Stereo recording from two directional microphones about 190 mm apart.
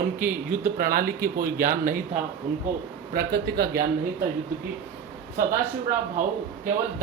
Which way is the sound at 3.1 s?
55° right (ahead or behind).